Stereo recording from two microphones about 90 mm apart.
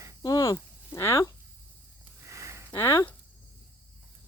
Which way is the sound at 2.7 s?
30° left (ahead or behind).